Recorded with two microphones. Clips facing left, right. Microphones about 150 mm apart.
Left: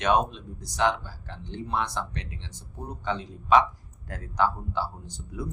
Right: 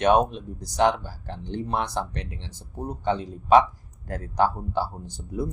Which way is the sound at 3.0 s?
40° right (ahead or behind).